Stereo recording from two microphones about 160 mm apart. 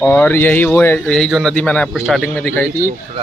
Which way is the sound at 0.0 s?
10° left (ahead or behind).